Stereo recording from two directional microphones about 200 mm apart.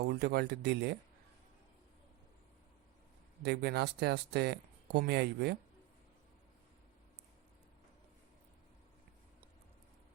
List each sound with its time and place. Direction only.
0.0 s speech: 55° right (ahead or behind)
3.4 s speech: 55° right (ahead or behind)